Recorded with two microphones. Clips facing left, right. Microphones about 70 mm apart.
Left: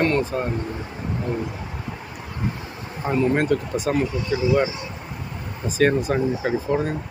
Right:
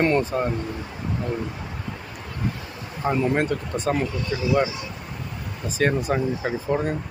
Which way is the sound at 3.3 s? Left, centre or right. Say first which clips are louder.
Left 3 dB; centre.